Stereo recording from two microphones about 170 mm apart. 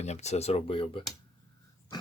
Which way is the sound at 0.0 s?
40° left (ahead or behind).